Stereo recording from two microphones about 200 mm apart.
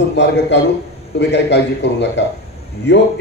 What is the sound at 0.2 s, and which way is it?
A man's voice, 60° left (ahead or behind).